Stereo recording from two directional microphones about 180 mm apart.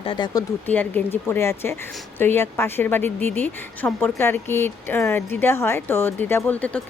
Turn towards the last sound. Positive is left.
turn(degrees=10)  # may be behind; listen again after turning